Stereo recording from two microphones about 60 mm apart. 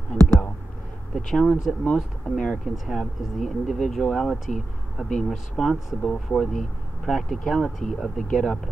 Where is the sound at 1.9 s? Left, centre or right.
Centre.